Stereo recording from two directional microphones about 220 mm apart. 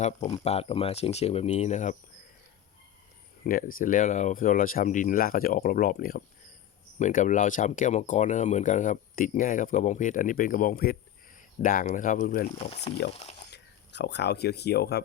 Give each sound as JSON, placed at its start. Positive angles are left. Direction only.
{"t": 0.0, "sound": "speech", "side_deg": 30}
{"t": 3.4, "sound": "speech", "side_deg": 40}
{"t": 13.5, "sound": "speech", "side_deg": 50}